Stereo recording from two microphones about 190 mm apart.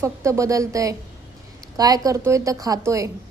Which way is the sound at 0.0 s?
15° right (ahead or behind).